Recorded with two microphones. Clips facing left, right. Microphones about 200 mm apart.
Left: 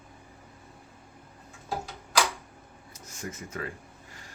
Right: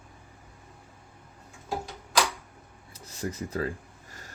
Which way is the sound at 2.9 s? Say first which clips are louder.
Right 5 dB; 35° right (ahead or behind).